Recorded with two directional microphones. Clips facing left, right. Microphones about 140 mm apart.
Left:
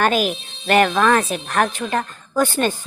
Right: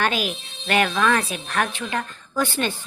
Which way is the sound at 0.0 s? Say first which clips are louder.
Left 5 dB; 45° left (ahead or behind).